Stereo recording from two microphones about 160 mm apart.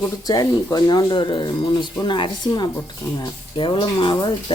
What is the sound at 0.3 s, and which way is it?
Speech, 20° left (ahead or behind).